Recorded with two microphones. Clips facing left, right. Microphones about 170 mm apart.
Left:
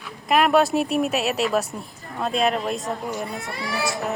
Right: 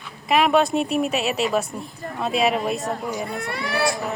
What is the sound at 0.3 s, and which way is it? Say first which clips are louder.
Speech: even; centre (ahead or behind).